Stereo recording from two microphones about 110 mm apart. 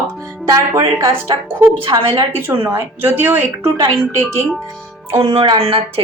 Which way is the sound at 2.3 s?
20° right (ahead or behind).